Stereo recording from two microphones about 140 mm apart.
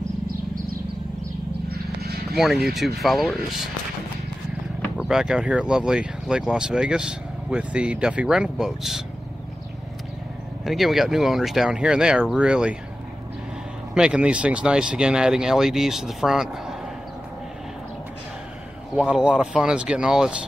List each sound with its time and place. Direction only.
1.7 s a sound: 90° right
2.3 s speech: centre (ahead or behind)
5.0 s speech: 5° right (ahead or behind)
10.6 s speech: centre (ahead or behind)
13.9 s speech: 5° right (ahead or behind)
18.9 s speech: 5° right (ahead or behind)